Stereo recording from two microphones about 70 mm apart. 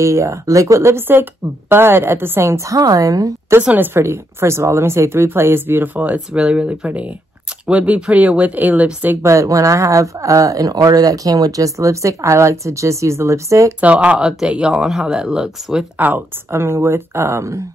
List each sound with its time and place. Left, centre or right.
0.0 s speech: right
3.7 s speech: right
4.0 s speech: right; by 6.9 s centre
6.9 s speech: right
9.2 s speech: right
13.7 s speech: centre
16.4 s speech: right